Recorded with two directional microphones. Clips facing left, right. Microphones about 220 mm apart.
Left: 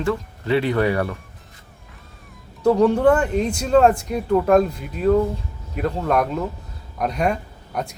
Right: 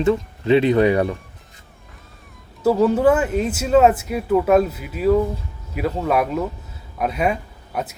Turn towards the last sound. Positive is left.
turn(degrees=-5)  # may be behind; listen again after turning